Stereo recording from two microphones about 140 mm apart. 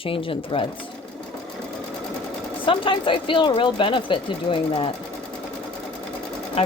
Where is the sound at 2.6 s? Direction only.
35° left (ahead or behind).